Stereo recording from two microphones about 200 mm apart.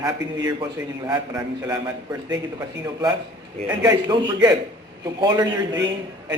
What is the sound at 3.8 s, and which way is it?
A man's voice, 20° right (ahead or behind).